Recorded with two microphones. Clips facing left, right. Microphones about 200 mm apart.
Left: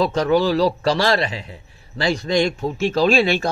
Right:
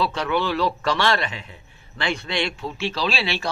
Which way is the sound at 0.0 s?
40° left (ahead or behind).